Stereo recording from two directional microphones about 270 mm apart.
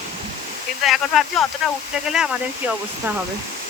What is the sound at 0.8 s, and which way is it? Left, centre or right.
Speech, centre.